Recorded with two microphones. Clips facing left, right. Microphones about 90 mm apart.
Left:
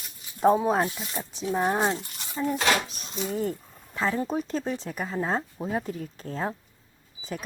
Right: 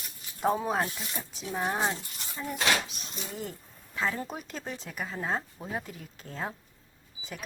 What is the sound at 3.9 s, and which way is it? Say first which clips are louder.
Speech: left 6 dB; 30° left (ahead or behind).